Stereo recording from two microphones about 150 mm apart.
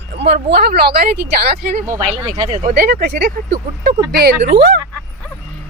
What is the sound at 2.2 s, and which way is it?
Speech, 25° right (ahead or behind).